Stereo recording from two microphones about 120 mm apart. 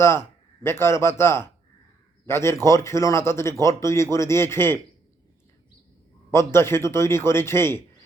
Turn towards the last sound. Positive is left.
turn(degrees=20)  # may be behind; listen again after turning